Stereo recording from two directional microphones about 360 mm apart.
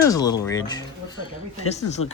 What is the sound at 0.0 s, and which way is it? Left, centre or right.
Speech, centre.